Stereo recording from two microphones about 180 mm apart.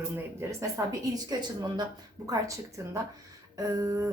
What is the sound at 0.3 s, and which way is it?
A woman's voice, 20° right (ahead or behind).